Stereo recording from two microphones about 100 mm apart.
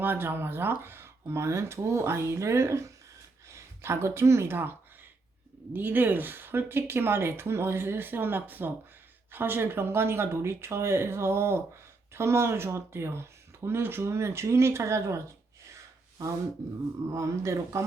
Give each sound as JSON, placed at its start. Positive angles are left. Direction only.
{"t": 0.0, "sound": "speech", "side_deg": -20}
{"t": 15.7, "sound": "gasp", "side_deg": -35}
{"t": 17.1, "sound": "speech", "side_deg": -30}